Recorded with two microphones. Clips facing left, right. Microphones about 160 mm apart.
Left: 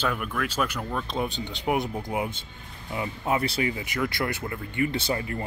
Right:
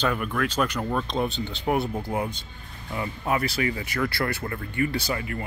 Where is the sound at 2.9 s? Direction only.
20° left (ahead or behind).